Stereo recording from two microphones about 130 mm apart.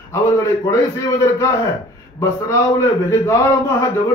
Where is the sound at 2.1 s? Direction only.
20° left (ahead or behind).